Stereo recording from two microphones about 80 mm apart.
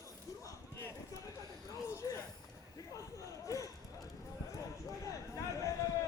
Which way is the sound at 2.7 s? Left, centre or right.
Left.